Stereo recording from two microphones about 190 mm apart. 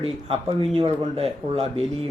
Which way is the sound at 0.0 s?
30° right (ahead or behind).